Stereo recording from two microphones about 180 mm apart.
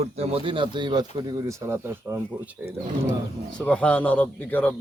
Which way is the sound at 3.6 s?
5° left (ahead or behind).